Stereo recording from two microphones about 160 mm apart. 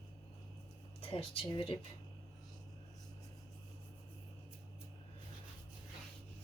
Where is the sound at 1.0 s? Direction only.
35° left (ahead or behind).